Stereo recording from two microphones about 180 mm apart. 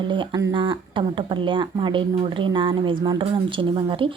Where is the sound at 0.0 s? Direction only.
25° right (ahead or behind).